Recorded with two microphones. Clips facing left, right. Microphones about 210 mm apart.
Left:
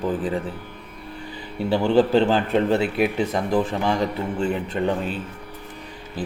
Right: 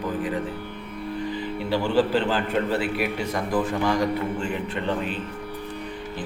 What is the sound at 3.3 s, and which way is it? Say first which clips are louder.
Speech: left 2 dB; 25° left (ahead or behind).